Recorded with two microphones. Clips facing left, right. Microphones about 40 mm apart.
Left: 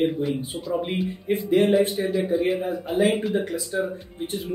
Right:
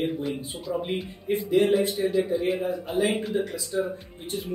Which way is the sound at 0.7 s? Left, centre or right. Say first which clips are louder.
Left 3 dB; centre.